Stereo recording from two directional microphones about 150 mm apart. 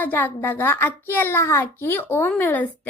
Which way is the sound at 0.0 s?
10° left (ahead or behind).